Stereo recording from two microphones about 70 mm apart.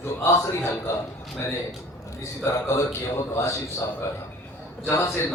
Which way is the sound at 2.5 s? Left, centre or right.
Left.